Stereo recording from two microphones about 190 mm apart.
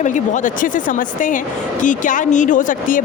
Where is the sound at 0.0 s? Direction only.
40° left (ahead or behind).